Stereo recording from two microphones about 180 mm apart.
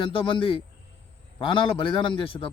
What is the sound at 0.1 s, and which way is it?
Speech, 30° left (ahead or behind).